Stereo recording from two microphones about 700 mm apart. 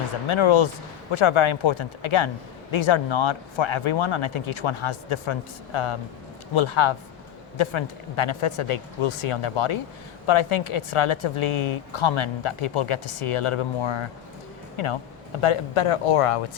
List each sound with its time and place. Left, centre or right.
0.3 s speech: left